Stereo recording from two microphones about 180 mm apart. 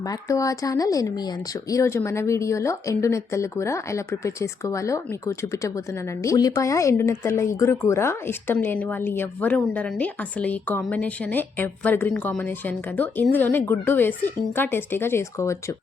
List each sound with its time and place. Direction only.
0.1 s speech: 20° left (ahead or behind)